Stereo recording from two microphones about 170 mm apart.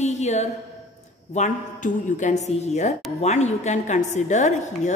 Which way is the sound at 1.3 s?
45° left (ahead or behind).